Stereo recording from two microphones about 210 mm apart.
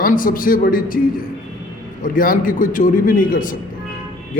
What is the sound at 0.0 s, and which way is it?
A man's voice, 40° left (ahead or behind).